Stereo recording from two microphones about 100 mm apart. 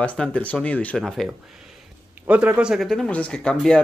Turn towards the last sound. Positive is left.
turn(degrees=10)  # may be behind; listen again after turning